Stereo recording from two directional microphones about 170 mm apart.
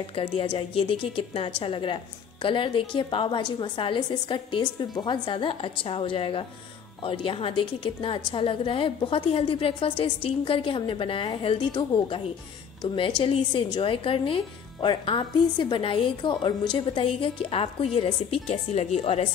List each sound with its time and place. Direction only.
0.1 s a woman's voice: 30° left (ahead or behind)
13.2 s a woman's voice: 30° left (ahead or behind)